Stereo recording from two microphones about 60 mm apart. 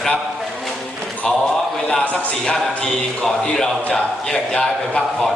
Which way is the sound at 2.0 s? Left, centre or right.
Left.